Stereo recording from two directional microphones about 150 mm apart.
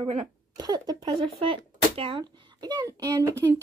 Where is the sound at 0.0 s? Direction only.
35° right (ahead or behind).